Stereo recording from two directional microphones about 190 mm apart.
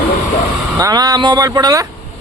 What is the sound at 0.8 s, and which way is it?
Speech, 20° right (ahead or behind).